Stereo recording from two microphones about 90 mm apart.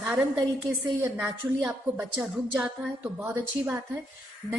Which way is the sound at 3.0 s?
20° right (ahead or behind).